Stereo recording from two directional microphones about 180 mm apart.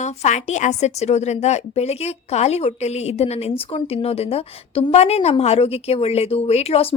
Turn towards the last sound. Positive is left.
turn(degrees=35)  # may be behind; listen again after turning